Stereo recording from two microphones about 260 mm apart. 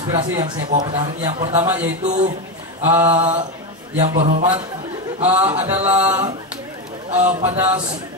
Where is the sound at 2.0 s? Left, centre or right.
Right.